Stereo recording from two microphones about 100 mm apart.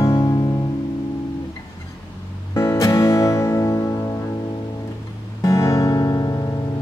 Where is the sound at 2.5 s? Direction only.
30° left (ahead or behind).